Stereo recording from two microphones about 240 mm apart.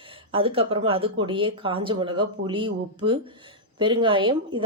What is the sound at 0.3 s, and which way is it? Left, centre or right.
Speech, right.